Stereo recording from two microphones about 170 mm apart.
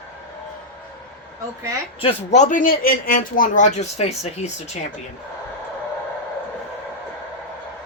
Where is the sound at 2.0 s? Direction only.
35° left (ahead or behind).